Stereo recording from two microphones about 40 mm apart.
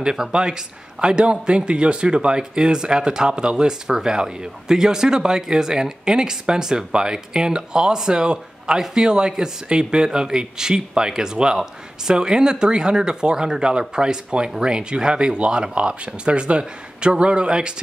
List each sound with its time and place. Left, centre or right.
0.0 s a man's voice: centre